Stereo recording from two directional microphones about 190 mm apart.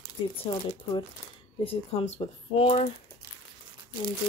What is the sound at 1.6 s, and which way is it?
Speech, 30° left (ahead or behind).